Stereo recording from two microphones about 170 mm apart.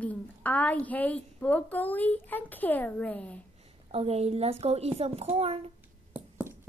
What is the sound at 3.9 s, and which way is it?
A child's voice, 35° right (ahead or behind).